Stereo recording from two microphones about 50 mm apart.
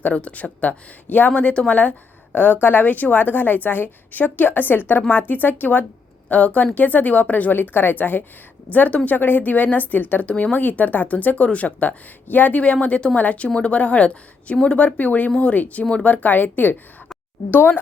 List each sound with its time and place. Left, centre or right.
0.0 s a woman's voice: left
14.9 s a woman's voice: left